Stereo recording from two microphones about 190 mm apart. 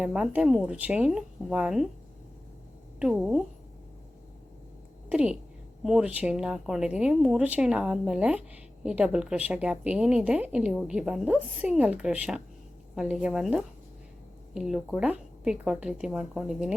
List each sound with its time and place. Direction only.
0.0 s a woman's voice: 5° right (ahead or behind)
3.0 s a woman's voice: 5° right (ahead or behind)
5.0 s a woman's voice: 5° right (ahead or behind)